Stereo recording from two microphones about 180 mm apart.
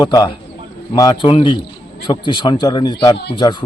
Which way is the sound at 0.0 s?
25° left (ahead or behind).